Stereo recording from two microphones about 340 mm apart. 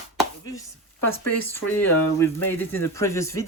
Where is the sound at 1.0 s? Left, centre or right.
Left.